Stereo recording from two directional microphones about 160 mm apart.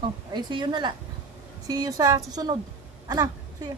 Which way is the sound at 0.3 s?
30° right (ahead or behind).